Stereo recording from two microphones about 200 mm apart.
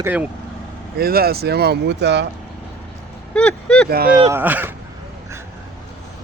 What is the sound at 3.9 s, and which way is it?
Speech, 50° right (ahead or behind).